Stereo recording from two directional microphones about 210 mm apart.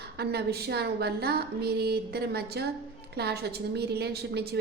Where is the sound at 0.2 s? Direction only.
50° right (ahead or behind).